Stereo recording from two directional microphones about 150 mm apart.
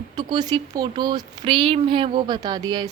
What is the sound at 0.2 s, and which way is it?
Speech, 30° right (ahead or behind).